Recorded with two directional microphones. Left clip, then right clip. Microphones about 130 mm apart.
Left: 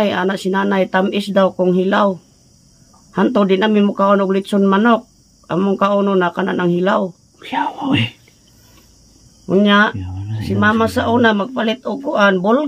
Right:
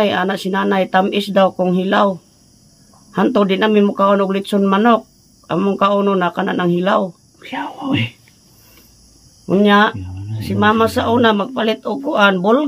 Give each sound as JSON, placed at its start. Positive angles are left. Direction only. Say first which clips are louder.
{"t": 0.0, "sound": "speech", "louder": "right 1 dB", "side_deg": 5}
{"t": 7.3, "sound": "speech", "louder": "left 7 dB", "side_deg": 30}
{"t": 9.5, "sound": "speech", "louder": "right 1 dB", "side_deg": -5}
{"t": 9.9, "sound": "speech", "louder": "left 2 dB", "side_deg": 30}
{"t": 10.5, "sound": "speech", "louder": "right 1 dB", "side_deg": -5}